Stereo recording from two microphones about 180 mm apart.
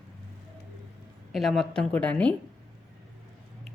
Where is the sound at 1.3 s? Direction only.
Centre (ahead or behind).